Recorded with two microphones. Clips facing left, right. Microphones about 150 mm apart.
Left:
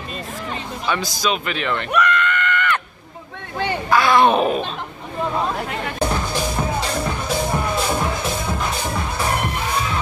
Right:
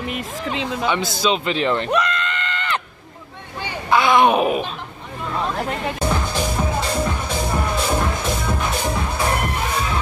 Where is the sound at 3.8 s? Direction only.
20° right (ahead or behind).